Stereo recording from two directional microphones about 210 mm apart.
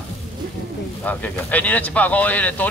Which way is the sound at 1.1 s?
5° left (ahead or behind).